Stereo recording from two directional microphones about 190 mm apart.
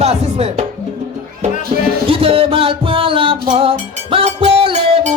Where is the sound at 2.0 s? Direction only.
30° right (ahead or behind).